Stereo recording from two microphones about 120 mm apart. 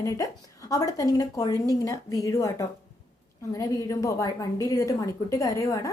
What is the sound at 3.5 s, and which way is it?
Speech, 25° left (ahead or behind).